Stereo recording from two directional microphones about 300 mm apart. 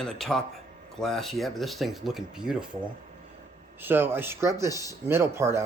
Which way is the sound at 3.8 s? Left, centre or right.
Centre.